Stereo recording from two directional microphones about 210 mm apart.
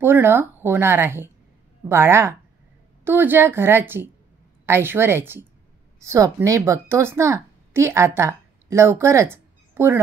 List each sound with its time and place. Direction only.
0.0 s a woman's voice: 10° right (ahead or behind)